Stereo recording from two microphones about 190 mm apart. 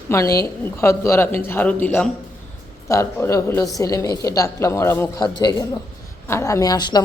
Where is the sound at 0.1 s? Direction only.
15° left (ahead or behind).